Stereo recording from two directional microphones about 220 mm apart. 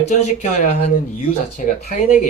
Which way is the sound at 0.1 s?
30° left (ahead or behind).